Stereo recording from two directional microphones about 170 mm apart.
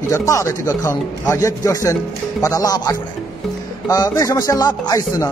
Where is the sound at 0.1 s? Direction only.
20° left (ahead or behind).